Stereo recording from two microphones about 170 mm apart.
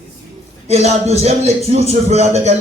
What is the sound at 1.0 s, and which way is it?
Speech, 40° right (ahead or behind).